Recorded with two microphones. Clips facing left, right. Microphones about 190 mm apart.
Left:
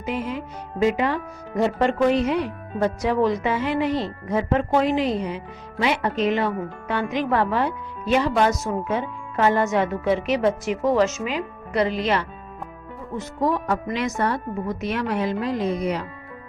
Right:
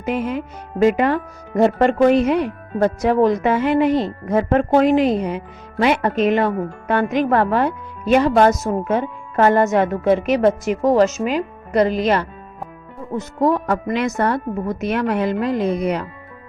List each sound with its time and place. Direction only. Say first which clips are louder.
0.0 s a woman's voice: right 5 dB; 55° right (ahead or behind)